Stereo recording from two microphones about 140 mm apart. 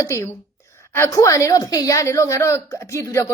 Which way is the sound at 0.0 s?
20° left (ahead or behind).